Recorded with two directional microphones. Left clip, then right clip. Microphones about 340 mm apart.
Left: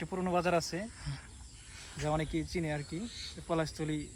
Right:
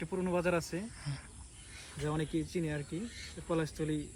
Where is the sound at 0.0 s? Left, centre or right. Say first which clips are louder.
Left 1 dB; left.